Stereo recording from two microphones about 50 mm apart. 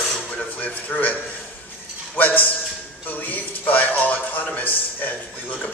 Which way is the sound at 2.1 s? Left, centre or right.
Left.